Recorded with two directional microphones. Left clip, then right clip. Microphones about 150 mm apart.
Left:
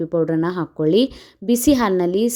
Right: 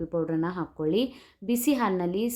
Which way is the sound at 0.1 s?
40° left (ahead or behind).